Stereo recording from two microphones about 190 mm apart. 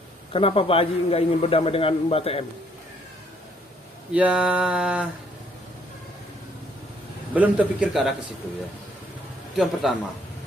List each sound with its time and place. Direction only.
0.3 s a man's voice: 30° left (ahead or behind)
4.1 s a sound: 5° right (ahead or behind)
7.3 s a man's voice: 5° right (ahead or behind)
9.6 s a man's voice: centre (ahead or behind)